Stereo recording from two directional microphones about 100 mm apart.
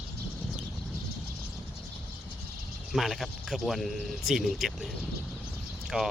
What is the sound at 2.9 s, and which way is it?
Speech, 5° right (ahead or behind).